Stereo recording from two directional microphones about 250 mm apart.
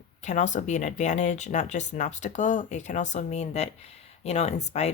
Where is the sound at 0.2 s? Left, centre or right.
Left.